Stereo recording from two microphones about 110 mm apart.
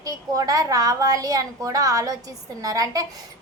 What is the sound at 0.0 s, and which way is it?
Speech, 30° right (ahead or behind).